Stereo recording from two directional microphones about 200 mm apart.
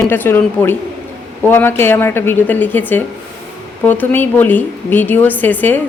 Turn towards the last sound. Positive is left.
turn(degrees=10)  # may be behind; listen again after turning